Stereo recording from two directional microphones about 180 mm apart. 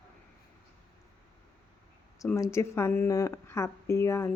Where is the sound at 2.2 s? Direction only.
15° left (ahead or behind).